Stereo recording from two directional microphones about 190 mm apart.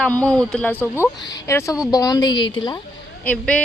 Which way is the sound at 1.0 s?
20° left (ahead or behind).